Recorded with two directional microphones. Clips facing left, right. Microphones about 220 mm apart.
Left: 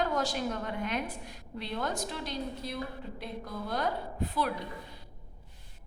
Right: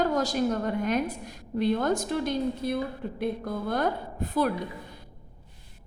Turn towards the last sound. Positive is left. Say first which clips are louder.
# right 6 dB
turn(degrees=-45)  # may be behind; listen again after turning